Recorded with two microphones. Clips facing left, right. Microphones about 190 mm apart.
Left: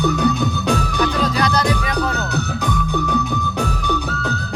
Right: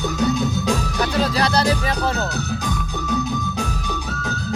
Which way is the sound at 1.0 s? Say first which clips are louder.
Even; 30° right (ahead or behind).